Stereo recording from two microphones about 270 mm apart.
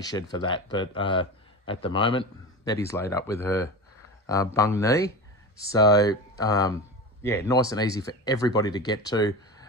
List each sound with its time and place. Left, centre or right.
0.0 s speech: centre